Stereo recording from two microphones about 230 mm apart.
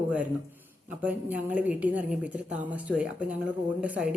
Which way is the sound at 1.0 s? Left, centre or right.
Centre.